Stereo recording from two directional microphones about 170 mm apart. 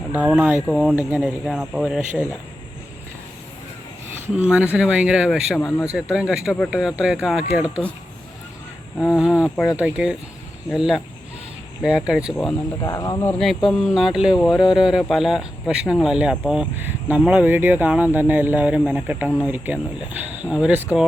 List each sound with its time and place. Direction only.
0.1 s speech: 5° right (ahead or behind)
4.4 s speech: 10° right (ahead or behind)
5.5 s speech: 15° left (ahead or behind)
5.8 s speech: 5° right (ahead or behind)
9.1 s speech: 5° right (ahead or behind)
12.8 s speech: 20° left (ahead or behind)
13.4 s speech: centre (ahead or behind)